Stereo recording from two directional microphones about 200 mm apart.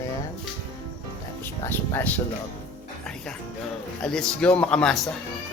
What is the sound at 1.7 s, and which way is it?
Speech, 10° left (ahead or behind).